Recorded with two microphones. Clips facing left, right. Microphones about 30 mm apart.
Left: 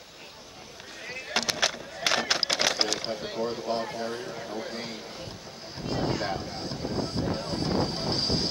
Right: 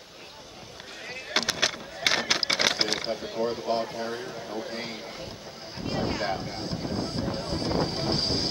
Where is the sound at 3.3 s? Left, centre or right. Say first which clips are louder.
Right 3 dB; centre.